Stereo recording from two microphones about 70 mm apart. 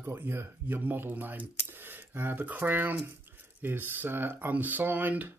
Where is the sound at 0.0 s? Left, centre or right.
Right.